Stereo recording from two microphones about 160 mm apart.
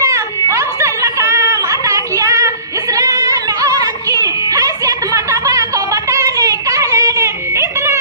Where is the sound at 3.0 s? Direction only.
20° right (ahead or behind).